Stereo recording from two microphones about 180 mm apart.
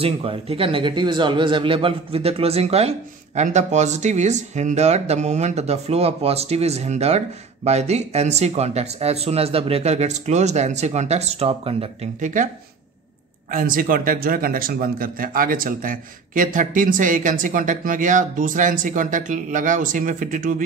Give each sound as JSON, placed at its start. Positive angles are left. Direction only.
{"t": 0.0, "sound": "speech", "side_deg": -30}
{"t": 13.5, "sound": "speech", "side_deg": -50}